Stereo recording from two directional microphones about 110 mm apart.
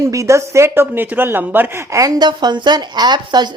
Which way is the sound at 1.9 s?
35° right (ahead or behind).